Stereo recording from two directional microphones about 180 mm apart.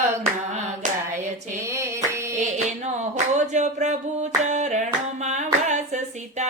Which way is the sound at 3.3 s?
40° right (ahead or behind).